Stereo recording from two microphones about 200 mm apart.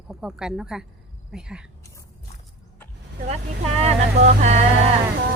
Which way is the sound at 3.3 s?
30° right (ahead or behind).